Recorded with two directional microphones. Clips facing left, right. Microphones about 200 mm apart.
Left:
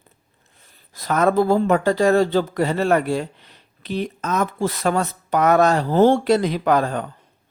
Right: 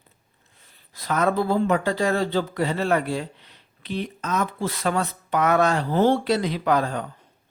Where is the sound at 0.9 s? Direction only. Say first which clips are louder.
Left 4 dB; 45° left (ahead or behind).